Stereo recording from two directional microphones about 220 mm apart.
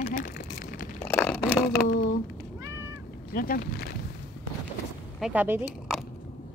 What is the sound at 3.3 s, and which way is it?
Speech, 40° left (ahead or behind).